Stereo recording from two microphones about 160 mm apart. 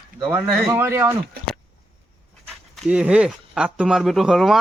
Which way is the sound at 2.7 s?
5° right (ahead or behind).